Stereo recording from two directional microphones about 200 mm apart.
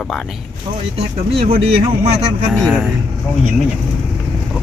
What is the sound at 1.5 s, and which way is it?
Speech, 30° right (ahead or behind).